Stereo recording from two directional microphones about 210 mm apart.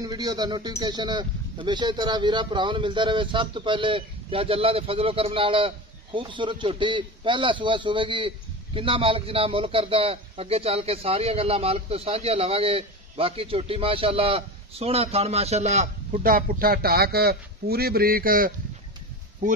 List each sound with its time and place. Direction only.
0.0 s a man's voice: 20° right (ahead or behind); by 18.5 s 45° right (ahead or behind)